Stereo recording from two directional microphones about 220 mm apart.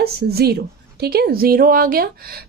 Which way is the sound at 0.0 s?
45° right (ahead or behind).